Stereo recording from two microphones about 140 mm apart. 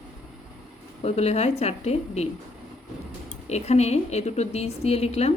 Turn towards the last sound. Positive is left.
turn(degrees=50)  # may be behind; listen again after turning